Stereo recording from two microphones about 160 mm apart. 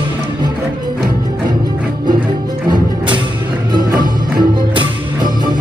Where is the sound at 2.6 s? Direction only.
30° right (ahead or behind).